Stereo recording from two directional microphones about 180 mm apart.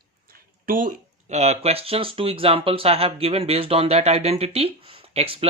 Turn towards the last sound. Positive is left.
turn(degrees=-30)  # may be behind; listen again after turning